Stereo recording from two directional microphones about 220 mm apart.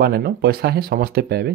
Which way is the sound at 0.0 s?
45° right (ahead or behind).